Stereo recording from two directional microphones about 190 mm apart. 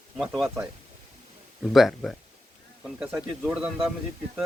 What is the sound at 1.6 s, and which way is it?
Speech, centre (ahead or behind).